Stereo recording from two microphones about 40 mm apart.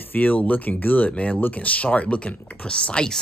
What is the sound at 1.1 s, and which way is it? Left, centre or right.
Speech, left.